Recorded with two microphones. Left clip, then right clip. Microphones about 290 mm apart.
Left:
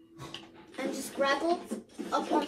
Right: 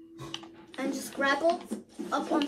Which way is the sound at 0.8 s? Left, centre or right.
Centre.